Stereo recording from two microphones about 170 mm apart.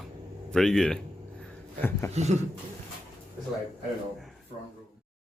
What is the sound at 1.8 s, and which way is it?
Speech, 15° left (ahead or behind).